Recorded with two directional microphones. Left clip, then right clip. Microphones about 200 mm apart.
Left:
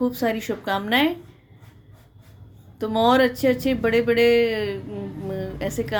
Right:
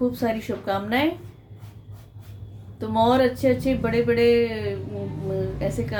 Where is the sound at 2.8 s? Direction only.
50° left (ahead or behind).